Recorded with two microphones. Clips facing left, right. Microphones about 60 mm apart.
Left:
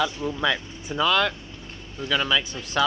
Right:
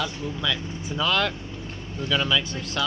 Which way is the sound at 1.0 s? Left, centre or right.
Centre.